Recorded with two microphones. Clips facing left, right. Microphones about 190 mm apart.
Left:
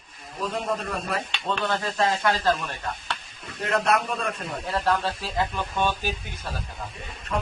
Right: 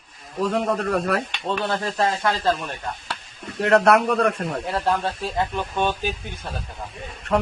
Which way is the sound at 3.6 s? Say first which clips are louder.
Right 7 dB; 65° right (ahead or behind).